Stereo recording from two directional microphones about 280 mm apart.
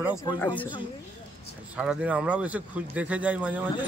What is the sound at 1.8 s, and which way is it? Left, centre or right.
A man's voice, centre.